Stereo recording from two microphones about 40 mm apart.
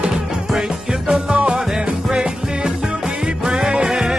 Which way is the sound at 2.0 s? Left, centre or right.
Centre.